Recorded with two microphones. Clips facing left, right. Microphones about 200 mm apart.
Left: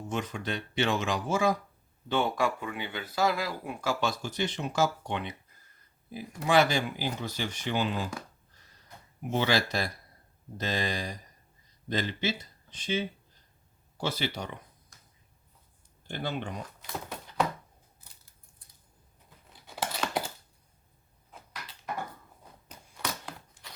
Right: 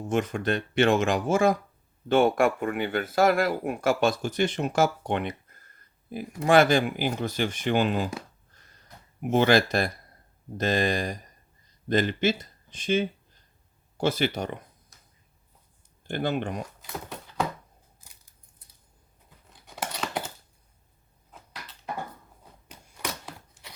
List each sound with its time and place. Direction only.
0.1 s speech: 50° right (ahead or behind)
9.2 s speech: 55° right (ahead or behind)
16.0 s speech: 55° right (ahead or behind)
19.6 s scissors: centre (ahead or behind)